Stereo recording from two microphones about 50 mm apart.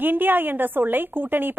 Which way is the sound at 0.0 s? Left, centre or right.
Right.